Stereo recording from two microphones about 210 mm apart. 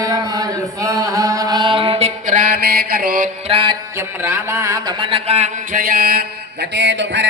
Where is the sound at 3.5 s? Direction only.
25° right (ahead or behind).